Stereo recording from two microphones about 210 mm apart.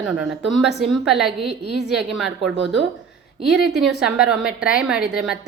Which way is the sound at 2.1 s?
Centre (ahead or behind).